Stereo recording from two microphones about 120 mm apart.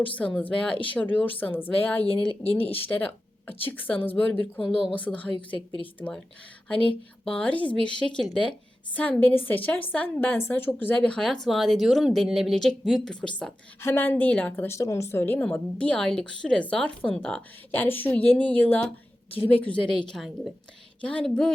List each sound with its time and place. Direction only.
0.1 s a woman's voice: 10° left (ahead or behind)
2.6 s speech: 55° left (ahead or behind)
3.6 s a woman's voice: 15° left (ahead or behind)
7.3 s a woman's voice: 10° left (ahead or behind)
13.8 s a woman's voice: 20° left (ahead or behind)
20.1 s speech: centre (ahead or behind)
21.0 s a woman's voice: 10° left (ahead or behind)